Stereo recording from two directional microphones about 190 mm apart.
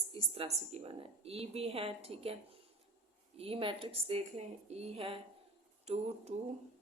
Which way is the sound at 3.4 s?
30° right (ahead or behind).